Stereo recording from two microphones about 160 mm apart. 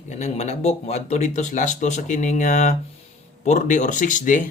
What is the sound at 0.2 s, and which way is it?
Speech, 45° left (ahead or behind).